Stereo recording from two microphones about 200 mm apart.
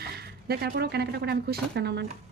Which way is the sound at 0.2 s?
50° right (ahead or behind).